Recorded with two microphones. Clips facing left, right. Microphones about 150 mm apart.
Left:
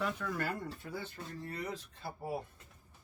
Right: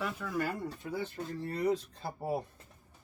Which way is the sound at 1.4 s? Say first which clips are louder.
Right 11 dB; 30° right (ahead or behind).